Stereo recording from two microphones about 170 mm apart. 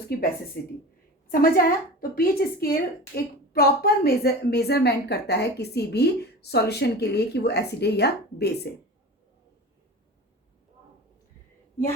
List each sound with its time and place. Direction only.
0.1 s a woman's voice: 65° left (ahead or behind)